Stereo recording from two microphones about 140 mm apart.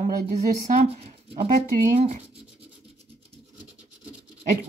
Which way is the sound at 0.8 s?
45° right (ahead or behind).